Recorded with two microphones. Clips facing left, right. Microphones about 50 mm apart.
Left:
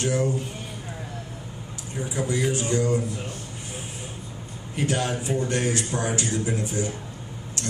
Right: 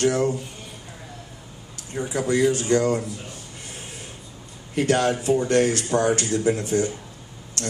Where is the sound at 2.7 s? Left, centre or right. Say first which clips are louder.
Right 2 dB; right.